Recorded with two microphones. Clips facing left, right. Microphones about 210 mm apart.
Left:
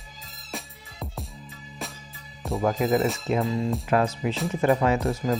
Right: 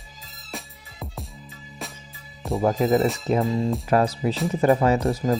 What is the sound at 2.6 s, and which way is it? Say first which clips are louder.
Speech: right 3 dB; 30° right (ahead or behind).